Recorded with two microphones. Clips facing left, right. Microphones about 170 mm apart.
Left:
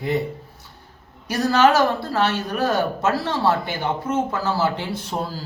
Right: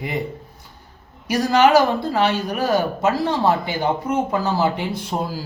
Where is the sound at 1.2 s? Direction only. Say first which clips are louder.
Right 1 dB; 10° right (ahead or behind).